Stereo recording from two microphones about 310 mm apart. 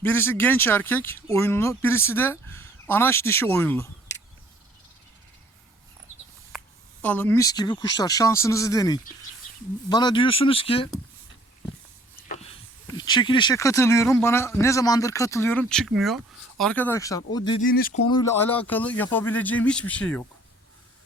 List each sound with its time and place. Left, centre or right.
0.0 s a man's voice: centre
7.0 s a man's voice: centre
12.3 s a sound: centre
13.0 s a man's voice: centre
17.6 s speech: left; by 20.2 s centre